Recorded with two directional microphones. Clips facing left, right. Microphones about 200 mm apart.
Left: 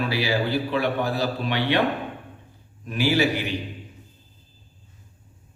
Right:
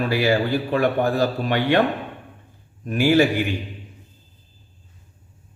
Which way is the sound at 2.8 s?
50° right (ahead or behind).